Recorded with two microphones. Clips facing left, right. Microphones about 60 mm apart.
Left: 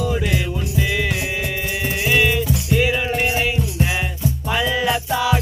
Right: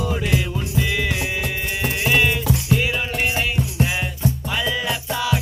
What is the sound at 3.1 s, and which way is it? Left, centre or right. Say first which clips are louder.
Music: left 2 dB; left.